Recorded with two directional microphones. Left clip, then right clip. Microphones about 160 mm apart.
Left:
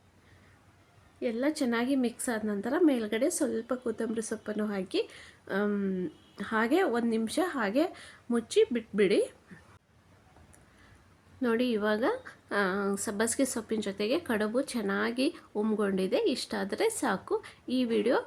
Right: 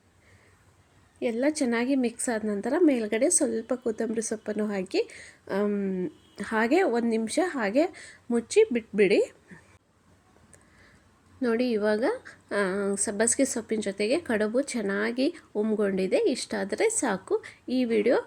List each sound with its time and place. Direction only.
1.2 s a woman's voice: 20° right (ahead or behind)
11.3 s a woman's voice: 10° right (ahead or behind)